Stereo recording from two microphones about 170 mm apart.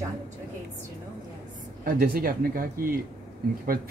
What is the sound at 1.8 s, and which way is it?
Speech, 60° right (ahead or behind).